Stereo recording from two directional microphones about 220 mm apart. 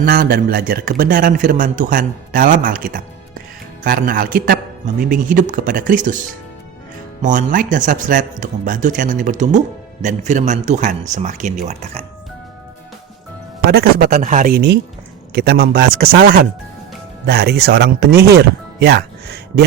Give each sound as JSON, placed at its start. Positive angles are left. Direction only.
{"t": 0.0, "sound": "a man's voice", "side_deg": -40}
{"t": 7.2, "sound": "a man's voice", "side_deg": -35}
{"t": 13.7, "sound": "a man's voice", "side_deg": -45}